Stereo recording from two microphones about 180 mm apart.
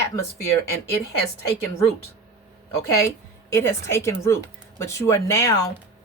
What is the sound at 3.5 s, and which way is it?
Speech, 15° left (ahead or behind).